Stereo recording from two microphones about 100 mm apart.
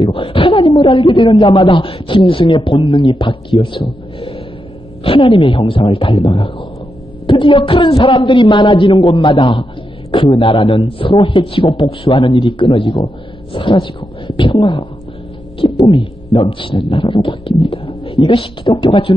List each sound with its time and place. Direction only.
0.0 s a man's voice: 60° left (ahead or behind)